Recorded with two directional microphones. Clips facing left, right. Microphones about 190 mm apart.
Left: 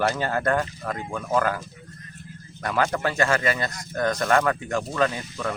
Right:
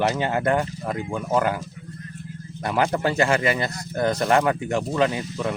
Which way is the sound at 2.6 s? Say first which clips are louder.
Right 2 dB; 25° right (ahead or behind).